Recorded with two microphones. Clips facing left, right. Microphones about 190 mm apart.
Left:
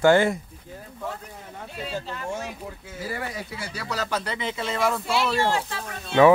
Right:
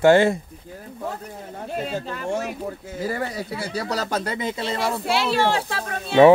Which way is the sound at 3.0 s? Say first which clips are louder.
Right 5 dB; 40° right (ahead or behind).